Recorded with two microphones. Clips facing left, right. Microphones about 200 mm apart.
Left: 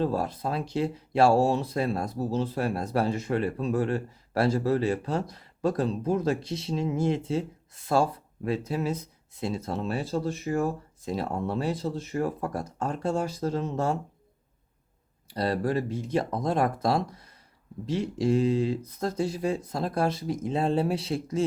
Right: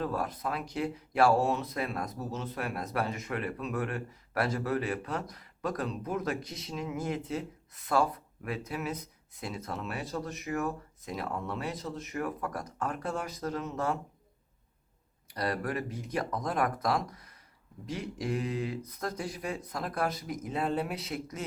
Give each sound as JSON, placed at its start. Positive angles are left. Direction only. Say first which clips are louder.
{"t": 0.0, "sound": "speech", "louder": "left 5 dB", "side_deg": 25}
{"t": 15.3, "sound": "speech", "louder": "left 6 dB", "side_deg": 30}